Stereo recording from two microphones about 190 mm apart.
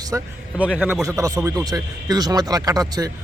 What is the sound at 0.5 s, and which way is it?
A man's voice, 5° right (ahead or behind).